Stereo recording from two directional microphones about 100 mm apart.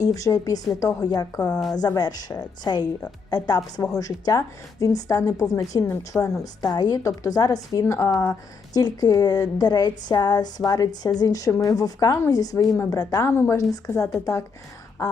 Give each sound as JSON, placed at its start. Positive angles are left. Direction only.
{"t": 0.0, "sound": "a woman's voice", "side_deg": 35}
{"t": 13.2, "sound": "speech", "side_deg": 25}